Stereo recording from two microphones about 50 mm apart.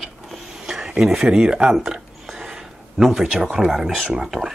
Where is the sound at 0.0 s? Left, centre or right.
Centre.